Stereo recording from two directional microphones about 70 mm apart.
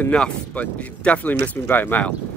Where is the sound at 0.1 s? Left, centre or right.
Centre.